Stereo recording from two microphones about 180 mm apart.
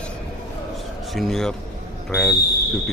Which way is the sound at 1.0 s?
Centre (ahead or behind).